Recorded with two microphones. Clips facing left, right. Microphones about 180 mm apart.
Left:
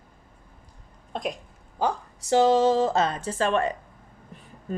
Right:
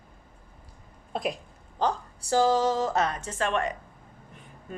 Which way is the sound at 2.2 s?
20° left (ahead or behind).